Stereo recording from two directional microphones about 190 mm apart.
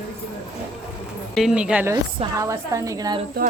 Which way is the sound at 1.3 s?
5° right (ahead or behind).